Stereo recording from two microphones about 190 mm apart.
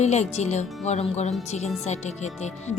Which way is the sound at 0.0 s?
35° left (ahead or behind).